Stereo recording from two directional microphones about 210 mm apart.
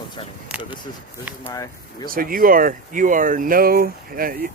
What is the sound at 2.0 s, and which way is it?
Speech, 45° right (ahead or behind).